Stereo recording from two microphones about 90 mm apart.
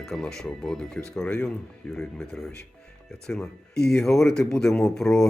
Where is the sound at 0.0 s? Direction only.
5° left (ahead or behind).